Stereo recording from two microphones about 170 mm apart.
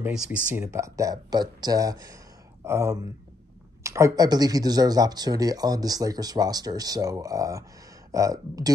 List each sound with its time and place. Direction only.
0.0 s speech: 15° right (ahead or behind)